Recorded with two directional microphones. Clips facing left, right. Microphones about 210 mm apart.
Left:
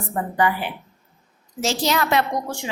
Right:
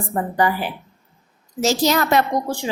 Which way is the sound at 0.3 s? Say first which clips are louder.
Right 1 dB; 40° right (ahead or behind).